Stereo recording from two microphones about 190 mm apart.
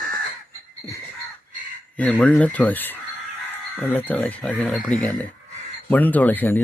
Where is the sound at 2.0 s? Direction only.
5° left (ahead or behind).